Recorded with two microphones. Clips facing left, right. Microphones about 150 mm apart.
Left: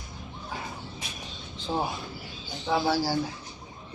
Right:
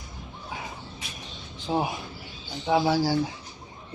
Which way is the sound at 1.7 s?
20° right (ahead or behind).